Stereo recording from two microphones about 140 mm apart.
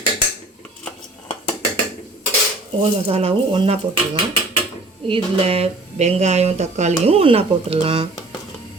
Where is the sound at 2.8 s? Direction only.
45° right (ahead or behind).